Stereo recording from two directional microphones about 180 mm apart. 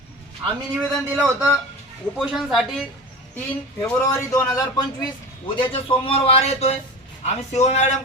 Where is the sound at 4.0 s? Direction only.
15° left (ahead or behind).